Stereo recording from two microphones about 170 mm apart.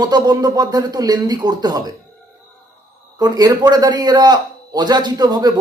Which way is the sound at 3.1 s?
20° right (ahead or behind).